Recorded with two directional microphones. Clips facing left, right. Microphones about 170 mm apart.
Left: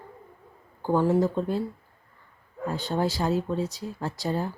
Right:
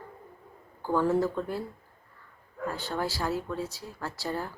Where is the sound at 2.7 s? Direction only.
20° left (ahead or behind).